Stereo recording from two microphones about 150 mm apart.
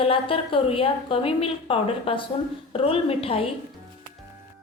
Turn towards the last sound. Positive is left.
turn(degrees=40)  # may be behind; listen again after turning